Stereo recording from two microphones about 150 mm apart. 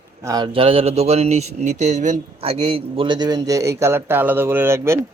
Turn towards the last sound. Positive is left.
turn(degrees=-15)  # may be behind; listen again after turning